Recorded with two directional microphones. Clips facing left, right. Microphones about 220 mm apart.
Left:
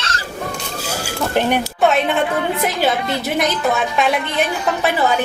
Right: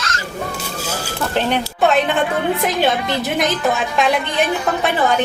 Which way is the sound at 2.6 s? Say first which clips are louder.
Right 1 dB; centre (ahead or behind).